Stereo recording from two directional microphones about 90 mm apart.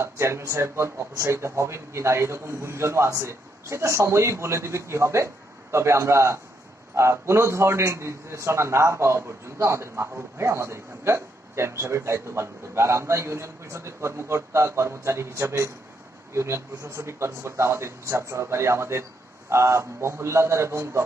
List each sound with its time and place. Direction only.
0.0 s a man's voice: 30° right (ahead or behind)